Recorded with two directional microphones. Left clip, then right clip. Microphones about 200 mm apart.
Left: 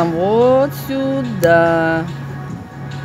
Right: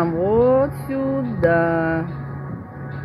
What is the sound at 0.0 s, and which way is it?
Music, 25° left (ahead or behind).